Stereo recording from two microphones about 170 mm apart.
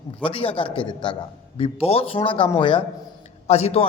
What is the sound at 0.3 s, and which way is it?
A man's voice, 35° left (ahead or behind).